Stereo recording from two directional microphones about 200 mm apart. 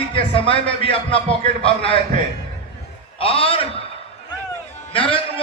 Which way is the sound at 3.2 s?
30° left (ahead or behind).